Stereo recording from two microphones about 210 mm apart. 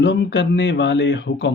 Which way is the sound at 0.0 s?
55° left (ahead or behind).